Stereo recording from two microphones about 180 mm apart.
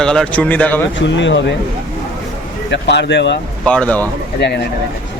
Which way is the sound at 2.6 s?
75° left (ahead or behind).